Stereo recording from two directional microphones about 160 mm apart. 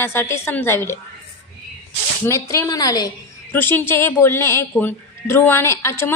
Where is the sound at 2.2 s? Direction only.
15° left (ahead or behind).